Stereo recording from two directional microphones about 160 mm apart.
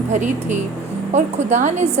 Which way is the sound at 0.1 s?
50° right (ahead or behind).